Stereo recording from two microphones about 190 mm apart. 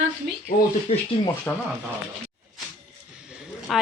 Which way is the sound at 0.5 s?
50° left (ahead or behind).